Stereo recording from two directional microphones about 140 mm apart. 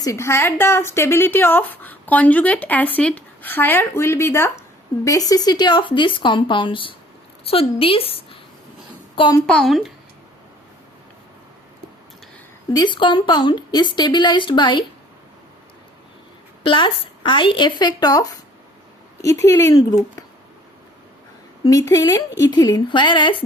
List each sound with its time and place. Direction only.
0.0 s a woman's voice: 20° left (ahead or behind); by 8.4 s 40° left (ahead or behind)
9.5 s speech: centre (ahead or behind)
12.7 s speech: 35° left (ahead or behind)
16.6 s speech: 35° left (ahead or behind)
21.6 s speech: 25° left (ahead or behind)